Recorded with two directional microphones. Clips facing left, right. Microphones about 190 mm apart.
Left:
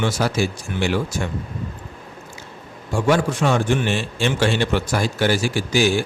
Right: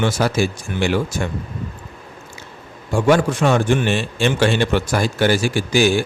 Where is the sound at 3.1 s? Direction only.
55° right (ahead or behind).